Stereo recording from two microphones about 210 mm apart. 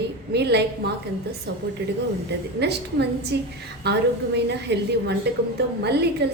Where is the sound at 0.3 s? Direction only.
50° right (ahead or behind).